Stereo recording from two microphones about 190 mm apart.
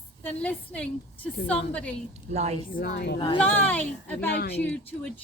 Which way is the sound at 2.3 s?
35° right (ahead or behind).